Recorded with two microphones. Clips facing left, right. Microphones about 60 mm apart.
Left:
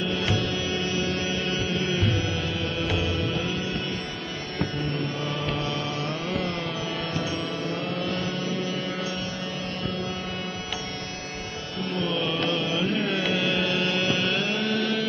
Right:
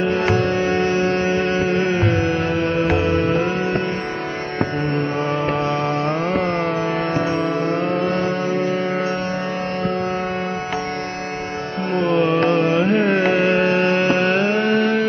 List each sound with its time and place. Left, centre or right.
0.0 s music: right
5.5 s music: right
11.9 s carnatic music: right